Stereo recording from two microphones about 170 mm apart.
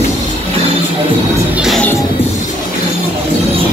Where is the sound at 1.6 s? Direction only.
Centre (ahead or behind).